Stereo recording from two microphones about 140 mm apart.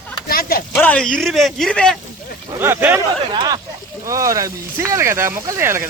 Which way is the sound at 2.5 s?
15° right (ahead or behind).